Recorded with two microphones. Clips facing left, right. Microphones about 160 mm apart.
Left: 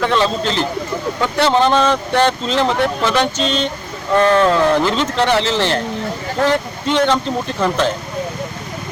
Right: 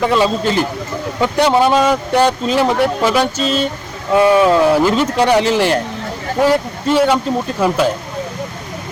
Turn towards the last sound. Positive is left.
turn(degrees=-10)  # may be behind; listen again after turning